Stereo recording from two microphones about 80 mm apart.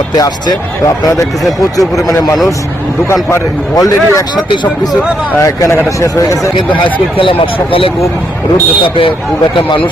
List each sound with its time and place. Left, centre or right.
1.0 s speech: left
1.5 s speech: centre
2.0 s speech: left
3.8 s speech: left
5.4 s speech: left
6.8 s speech: left